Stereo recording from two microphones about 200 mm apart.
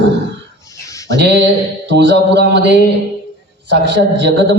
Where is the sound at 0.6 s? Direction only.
15° left (ahead or behind).